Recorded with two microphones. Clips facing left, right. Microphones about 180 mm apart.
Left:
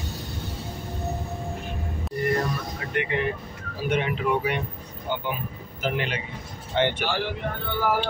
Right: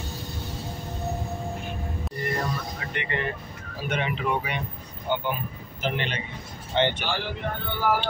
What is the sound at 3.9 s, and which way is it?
Speech, 5° left (ahead or behind).